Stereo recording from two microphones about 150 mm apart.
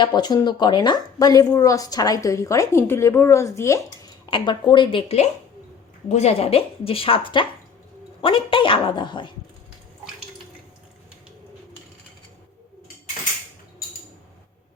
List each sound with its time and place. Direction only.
0.0 s a woman's voice: 30° left (ahead or behind)
4.3 s speech: 30° left (ahead or behind)